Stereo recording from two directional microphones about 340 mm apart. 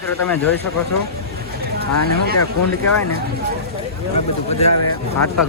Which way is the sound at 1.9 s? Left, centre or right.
Left.